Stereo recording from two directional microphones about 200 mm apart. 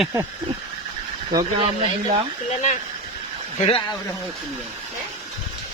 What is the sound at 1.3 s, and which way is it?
Speech, 20° right (ahead or behind).